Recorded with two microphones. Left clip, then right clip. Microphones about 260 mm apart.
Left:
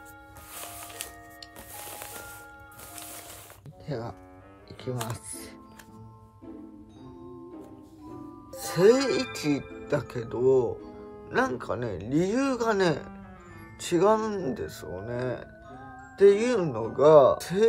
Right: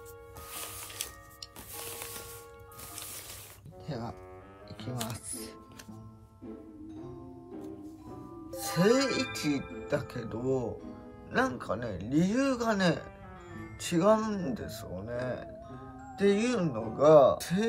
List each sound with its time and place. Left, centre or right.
2.0 s music: centre
3.8 s speech: left
5.1 s speech: left
8.5 s music: left
9.8 s speech: left